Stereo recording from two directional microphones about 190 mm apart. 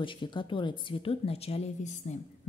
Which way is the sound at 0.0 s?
25° left (ahead or behind).